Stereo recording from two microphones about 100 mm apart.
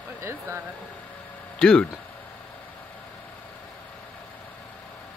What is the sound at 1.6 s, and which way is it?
Speech, 10° left (ahead or behind).